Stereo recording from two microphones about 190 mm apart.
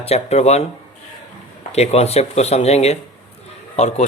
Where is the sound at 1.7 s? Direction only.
35° left (ahead or behind).